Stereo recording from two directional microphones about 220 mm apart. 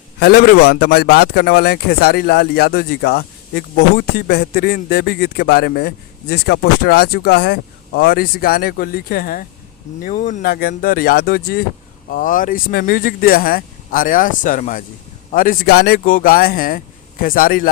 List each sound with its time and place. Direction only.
0.2 s a man's voice: 45° left (ahead or behind)